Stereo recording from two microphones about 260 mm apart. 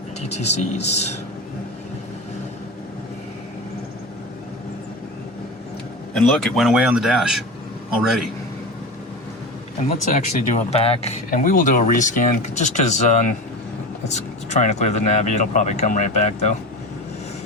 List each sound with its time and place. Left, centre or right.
0.2 s speech: left
6.1 s speech: centre
10.0 s speech: left